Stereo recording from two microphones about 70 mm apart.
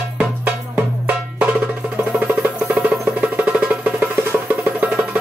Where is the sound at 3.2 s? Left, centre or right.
Centre.